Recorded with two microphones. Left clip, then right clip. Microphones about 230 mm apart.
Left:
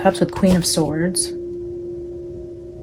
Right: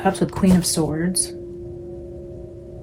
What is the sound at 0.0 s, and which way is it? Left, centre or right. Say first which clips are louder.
Speech: left 4 dB; left.